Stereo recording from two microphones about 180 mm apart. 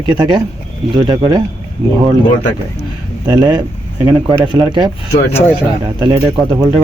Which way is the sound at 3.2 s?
25° right (ahead or behind).